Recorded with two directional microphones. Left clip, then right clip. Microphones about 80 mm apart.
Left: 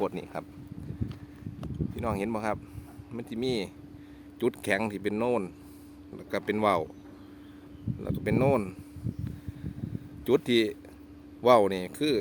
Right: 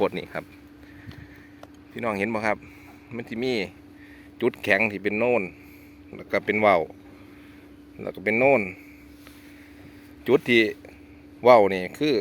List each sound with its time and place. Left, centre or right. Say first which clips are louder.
0.1 s speech: right 5 dB; centre
2.0 s speech: right 6 dB; centre
4.4 s speech: right 7 dB; centre
5.1 s speech: right 5 dB; left
6.1 s speech: right 6 dB; centre
8.0 s speech: right 7 dB; centre
10.2 s speech: right 5 dB; centre